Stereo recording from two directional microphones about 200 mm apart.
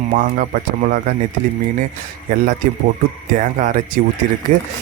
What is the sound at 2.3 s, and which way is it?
Speech, 45° right (ahead or behind).